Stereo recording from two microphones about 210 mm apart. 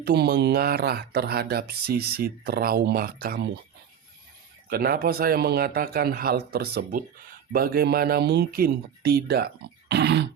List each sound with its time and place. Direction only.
0.0 s speech: 50° right (ahead or behind)
4.7 s speech: 45° right (ahead or behind)
9.9 s a sound: 55° right (ahead or behind)